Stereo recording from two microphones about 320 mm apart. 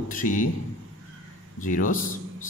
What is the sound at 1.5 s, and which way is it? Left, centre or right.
Speech, left.